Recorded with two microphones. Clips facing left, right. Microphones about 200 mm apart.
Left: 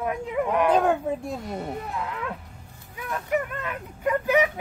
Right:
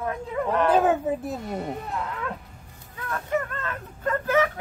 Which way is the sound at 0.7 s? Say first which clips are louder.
Right 1 dB; 5° right (ahead or behind).